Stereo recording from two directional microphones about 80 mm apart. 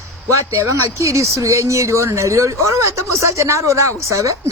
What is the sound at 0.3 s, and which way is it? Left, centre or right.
Speech, right.